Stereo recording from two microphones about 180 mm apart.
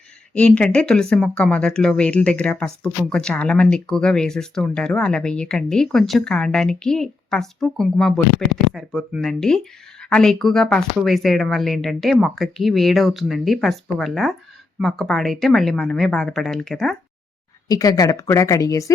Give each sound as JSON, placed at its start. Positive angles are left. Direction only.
{"t": 0.3, "sound": "speech", "side_deg": 5}
{"t": 17.7, "sound": "speech", "side_deg": 20}